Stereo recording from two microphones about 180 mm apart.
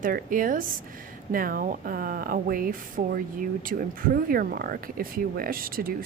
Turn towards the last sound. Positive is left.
turn(degrees=-55)  # may be behind; listen again after turning